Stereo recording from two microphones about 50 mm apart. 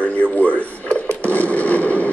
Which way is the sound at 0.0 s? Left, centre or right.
Left.